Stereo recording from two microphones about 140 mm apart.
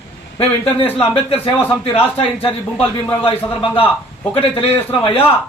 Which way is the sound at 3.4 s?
15° left (ahead or behind).